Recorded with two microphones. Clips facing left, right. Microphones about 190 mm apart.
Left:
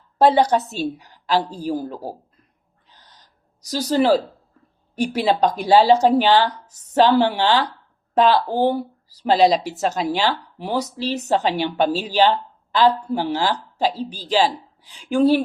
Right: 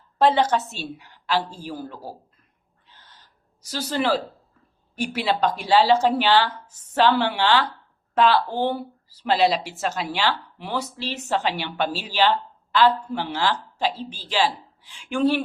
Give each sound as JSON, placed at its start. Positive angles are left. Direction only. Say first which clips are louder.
{"t": 0.4, "sound": "a woman's voice", "louder": "left 4 dB", "side_deg": 15}
{"t": 0.7, "sound": "speech", "louder": "left 9 dB", "side_deg": 40}
{"t": 3.7, "sound": "speech", "louder": "left 6 dB", "side_deg": 40}